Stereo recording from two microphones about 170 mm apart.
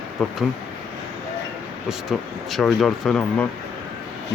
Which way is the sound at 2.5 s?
Centre (ahead or behind).